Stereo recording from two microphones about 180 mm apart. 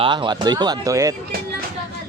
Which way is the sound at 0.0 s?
25° right (ahead or behind).